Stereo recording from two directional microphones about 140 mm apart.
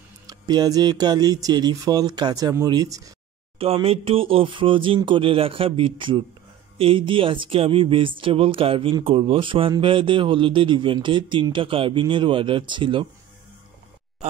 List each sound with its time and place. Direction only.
0.3 s speech: 30° right (ahead or behind)
3.5 s speech: 45° right (ahead or behind)